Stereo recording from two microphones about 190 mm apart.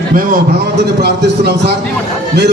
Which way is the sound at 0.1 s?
45° right (ahead or behind).